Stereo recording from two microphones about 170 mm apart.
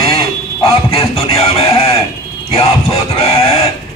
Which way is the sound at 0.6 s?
35° left (ahead or behind).